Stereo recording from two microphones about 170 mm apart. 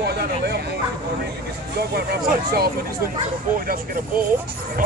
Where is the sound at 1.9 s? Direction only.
65° right (ahead or behind).